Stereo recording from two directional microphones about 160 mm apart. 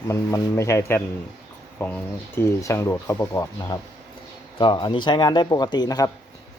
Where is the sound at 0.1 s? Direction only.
20° left (ahead or behind).